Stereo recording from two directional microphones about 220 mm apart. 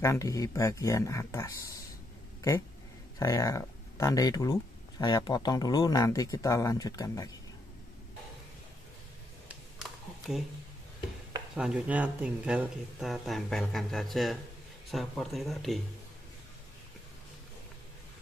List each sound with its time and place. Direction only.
0.0 s speech: 15° left (ahead or behind)
3.2 s speech: 15° left (ahead or behind)
9.5 s a sound: centre (ahead or behind)
11.5 s speech: 5° right (ahead or behind)